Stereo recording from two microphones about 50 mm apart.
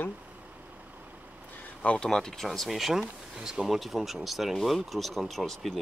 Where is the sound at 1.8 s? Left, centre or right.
Left.